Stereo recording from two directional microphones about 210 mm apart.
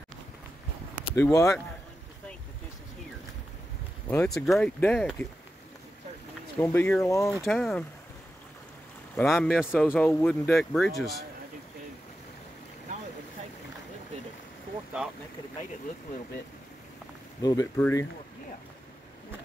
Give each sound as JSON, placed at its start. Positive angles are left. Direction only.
{"t": 0.9, "sound": "speech", "side_deg": 10}
{"t": 4.1, "sound": "speech", "side_deg": 10}
{"t": 6.6, "sound": "speech", "side_deg": 10}
{"t": 7.4, "sound": "speech", "side_deg": 0}
{"t": 9.1, "sound": "speech", "side_deg": 5}
{"t": 17.4, "sound": "speech", "side_deg": 15}